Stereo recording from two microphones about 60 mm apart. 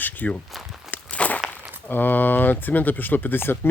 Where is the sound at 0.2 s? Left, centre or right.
Left.